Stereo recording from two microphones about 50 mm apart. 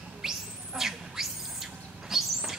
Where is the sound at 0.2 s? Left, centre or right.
Centre.